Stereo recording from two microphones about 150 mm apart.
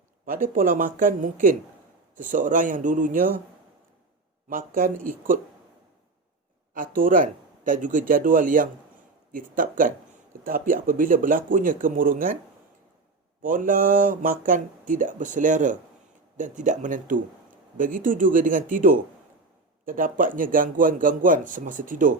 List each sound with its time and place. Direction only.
0.3 s speech: 65° right (ahead or behind)
4.4 s speech: 65° right (ahead or behind)
6.7 s speech: 65° right (ahead or behind)
13.4 s speech: 65° right (ahead or behind)